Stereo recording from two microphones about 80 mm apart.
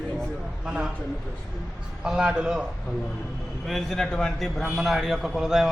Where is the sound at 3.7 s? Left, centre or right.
Centre.